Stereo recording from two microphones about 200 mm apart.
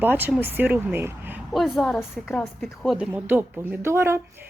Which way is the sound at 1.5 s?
Centre (ahead or behind).